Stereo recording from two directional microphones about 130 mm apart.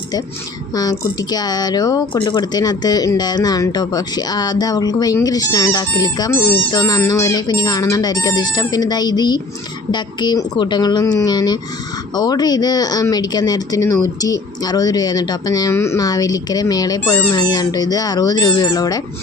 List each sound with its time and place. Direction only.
0.7 s speech: 30° left (ahead or behind)